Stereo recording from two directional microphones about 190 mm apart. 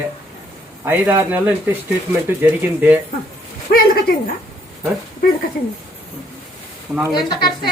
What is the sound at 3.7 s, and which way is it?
Speech, 50° left (ahead or behind).